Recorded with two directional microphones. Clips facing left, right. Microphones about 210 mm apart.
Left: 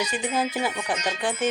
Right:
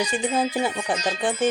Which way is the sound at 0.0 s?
30° right (ahead or behind).